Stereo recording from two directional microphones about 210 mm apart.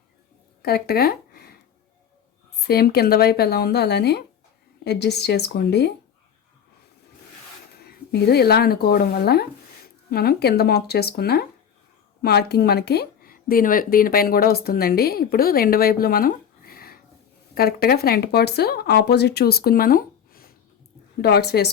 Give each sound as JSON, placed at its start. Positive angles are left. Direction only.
{"t": 0.6, "sound": "speech", "side_deg": 45}
{"t": 2.6, "sound": "speech", "side_deg": 50}
{"t": 7.8, "sound": "speech", "side_deg": 50}